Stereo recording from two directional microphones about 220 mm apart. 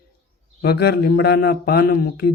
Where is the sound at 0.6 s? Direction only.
45° left (ahead or behind).